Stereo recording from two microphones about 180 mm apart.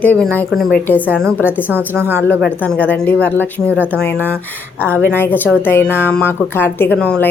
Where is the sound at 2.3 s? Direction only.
5° left (ahead or behind).